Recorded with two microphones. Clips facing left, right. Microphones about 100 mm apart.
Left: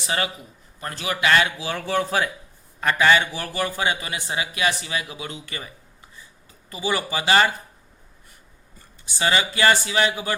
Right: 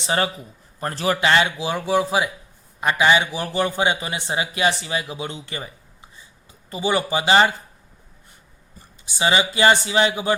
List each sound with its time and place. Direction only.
0.0 s a man's voice: 30° right (ahead or behind)
9.0 s a man's voice: 20° right (ahead or behind)